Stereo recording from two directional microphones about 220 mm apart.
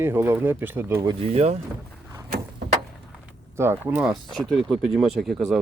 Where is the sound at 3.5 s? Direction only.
10° right (ahead or behind).